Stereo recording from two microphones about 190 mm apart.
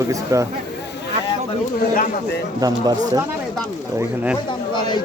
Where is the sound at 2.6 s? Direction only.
20° right (ahead or behind).